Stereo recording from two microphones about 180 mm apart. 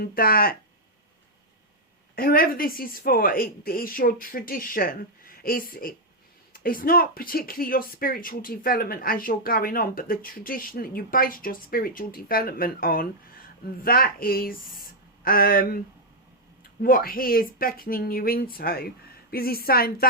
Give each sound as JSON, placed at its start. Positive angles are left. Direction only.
{"t": 0.0, "sound": "speech", "side_deg": 55}
{"t": 2.1, "sound": "speech", "side_deg": 50}
{"t": 16.8, "sound": "speech", "side_deg": 55}